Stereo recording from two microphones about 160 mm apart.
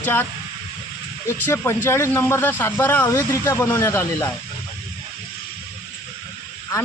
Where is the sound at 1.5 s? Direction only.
15° left (ahead or behind).